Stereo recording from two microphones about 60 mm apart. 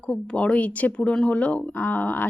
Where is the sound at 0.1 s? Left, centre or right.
Centre.